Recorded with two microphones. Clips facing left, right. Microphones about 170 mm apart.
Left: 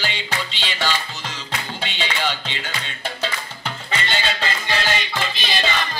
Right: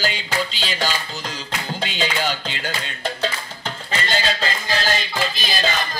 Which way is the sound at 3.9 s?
40° right (ahead or behind).